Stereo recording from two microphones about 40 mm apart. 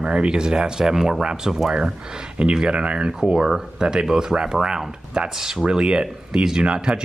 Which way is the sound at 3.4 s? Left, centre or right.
Centre.